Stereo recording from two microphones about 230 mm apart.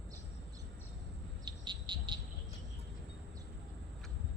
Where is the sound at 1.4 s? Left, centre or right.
Centre.